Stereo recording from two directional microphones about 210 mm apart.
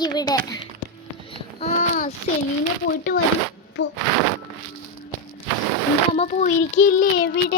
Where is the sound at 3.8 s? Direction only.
60° left (ahead or behind).